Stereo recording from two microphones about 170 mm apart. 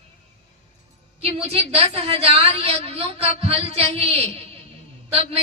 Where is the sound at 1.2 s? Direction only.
35° right (ahead or behind).